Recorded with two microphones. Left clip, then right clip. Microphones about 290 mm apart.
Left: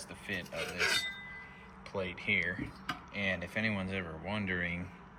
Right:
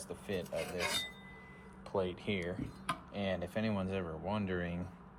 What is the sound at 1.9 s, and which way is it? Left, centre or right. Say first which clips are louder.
Speech: left 3 dB; centre.